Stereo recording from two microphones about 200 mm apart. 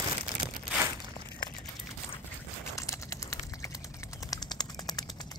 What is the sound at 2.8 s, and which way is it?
Typing, 15° left (ahead or behind).